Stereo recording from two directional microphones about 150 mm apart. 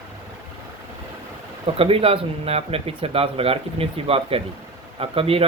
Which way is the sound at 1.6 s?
40° right (ahead or behind).